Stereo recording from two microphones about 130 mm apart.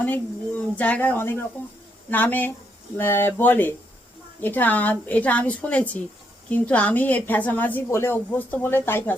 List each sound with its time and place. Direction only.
0.0 s a woman's voice: 15° left (ahead or behind)